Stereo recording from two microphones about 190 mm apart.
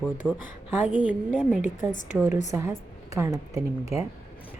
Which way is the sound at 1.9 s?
40° left (ahead or behind).